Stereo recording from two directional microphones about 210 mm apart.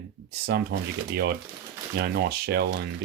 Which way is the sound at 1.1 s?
50° right (ahead or behind).